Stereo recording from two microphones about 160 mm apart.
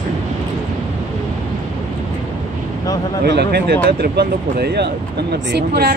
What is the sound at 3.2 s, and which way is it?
Speech, 85° right.